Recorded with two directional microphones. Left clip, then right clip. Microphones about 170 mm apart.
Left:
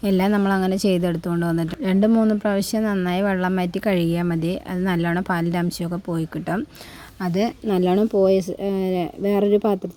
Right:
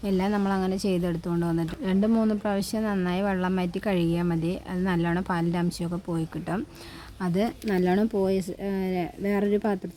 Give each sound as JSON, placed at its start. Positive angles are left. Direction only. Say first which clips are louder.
{"t": 0.0, "sound": "a woman's voice", "louder": "left 6 dB", "side_deg": 35}